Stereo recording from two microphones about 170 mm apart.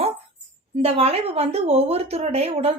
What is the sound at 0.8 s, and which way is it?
Speech, 35° right (ahead or behind).